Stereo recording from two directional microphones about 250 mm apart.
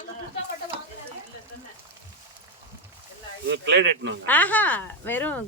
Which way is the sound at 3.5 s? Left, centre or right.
Right.